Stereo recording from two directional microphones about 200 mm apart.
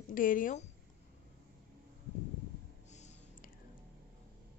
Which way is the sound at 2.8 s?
35° left (ahead or behind).